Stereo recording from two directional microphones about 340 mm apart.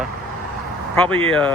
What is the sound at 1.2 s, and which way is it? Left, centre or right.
Speech, centre.